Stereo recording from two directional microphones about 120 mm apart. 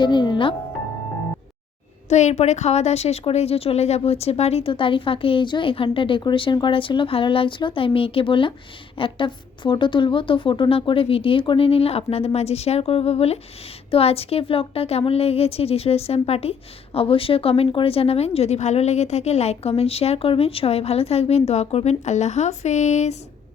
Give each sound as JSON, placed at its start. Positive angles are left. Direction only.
{"t": 0.0, "sound": "speech", "side_deg": 40}
{"t": 2.0, "sound": "a woman's voice", "side_deg": 75}